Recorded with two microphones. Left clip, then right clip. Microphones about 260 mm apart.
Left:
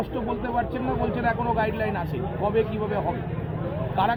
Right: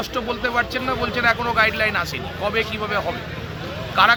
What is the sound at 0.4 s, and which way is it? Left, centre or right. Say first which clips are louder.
Speech: right 7 dB; right.